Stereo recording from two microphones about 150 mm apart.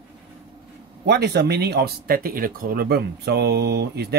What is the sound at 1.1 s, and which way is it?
Speech, 90° right.